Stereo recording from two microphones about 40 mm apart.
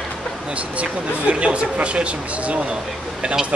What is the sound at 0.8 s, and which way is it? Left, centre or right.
Speech, right.